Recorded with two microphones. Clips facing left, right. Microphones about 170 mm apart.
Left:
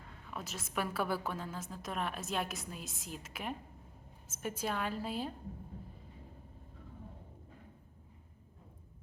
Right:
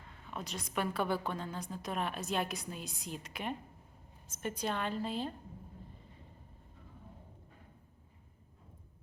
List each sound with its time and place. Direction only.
0.3 s a woman's voice: 5° left (ahead or behind)